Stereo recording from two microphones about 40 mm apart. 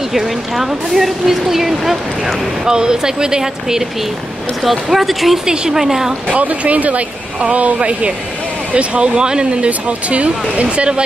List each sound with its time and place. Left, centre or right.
0.1 s speech: centre
2.7 s speech: centre
4.6 s speech: centre
5.5 s speech: centre
5.8 s speech: centre
6.2 s speech: right